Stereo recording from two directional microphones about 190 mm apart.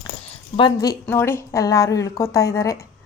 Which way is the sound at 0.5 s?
20° left (ahead or behind).